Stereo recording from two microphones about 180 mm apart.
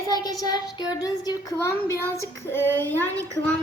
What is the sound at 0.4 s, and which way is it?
Child singing, 20° left (ahead or behind).